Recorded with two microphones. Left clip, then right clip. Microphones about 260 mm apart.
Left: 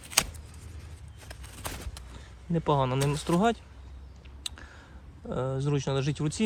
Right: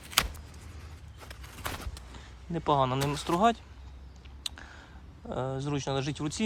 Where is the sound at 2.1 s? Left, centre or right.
Right.